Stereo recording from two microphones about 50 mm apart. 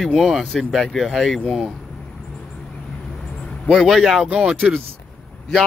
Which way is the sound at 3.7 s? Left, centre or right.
Centre.